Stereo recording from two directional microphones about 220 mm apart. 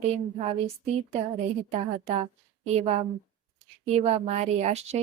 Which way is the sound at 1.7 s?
30° right (ahead or behind).